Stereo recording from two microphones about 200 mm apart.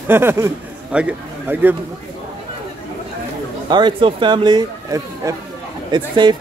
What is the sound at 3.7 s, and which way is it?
Speech, 25° right (ahead or behind).